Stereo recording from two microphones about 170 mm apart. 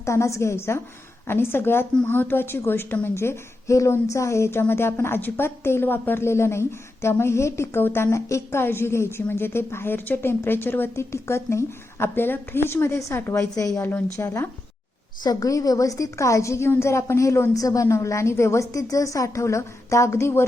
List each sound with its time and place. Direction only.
0.0 s a woman's voice: 15° left (ahead or behind)